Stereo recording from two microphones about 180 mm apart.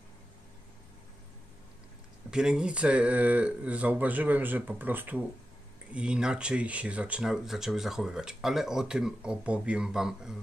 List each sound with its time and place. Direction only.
2.3 s speech: 5° right (ahead or behind)